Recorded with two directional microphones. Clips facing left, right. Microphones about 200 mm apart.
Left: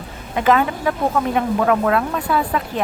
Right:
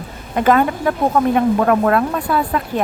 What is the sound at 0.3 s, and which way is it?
Speech, 45° right (ahead or behind).